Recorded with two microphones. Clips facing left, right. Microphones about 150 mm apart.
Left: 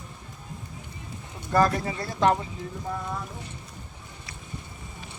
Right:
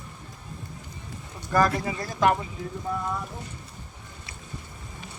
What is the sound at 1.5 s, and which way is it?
Speech, 30° left (ahead or behind).